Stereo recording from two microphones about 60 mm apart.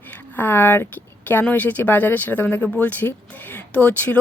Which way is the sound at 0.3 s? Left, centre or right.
Left.